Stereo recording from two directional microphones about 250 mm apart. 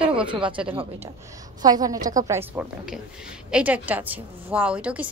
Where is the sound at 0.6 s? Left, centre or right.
Right.